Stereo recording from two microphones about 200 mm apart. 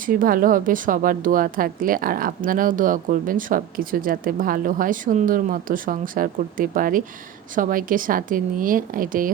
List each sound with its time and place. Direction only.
0.0 s a woman's voice: 45° right (ahead or behind)